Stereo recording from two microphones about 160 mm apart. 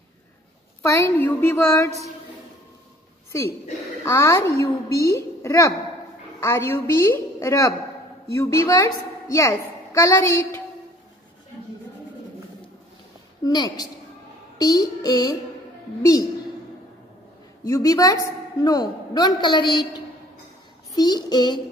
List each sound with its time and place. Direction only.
0.9 s a woman's voice: 15° left (ahead or behind)
3.3 s a woman's voice: 20° left (ahead or behind)
13.4 s a woman's voice: 25° left (ahead or behind)
17.6 s a woman's voice: 20° left (ahead or behind)